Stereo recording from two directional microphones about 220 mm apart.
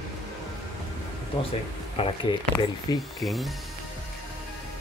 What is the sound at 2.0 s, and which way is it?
Speech, 20° left (ahead or behind).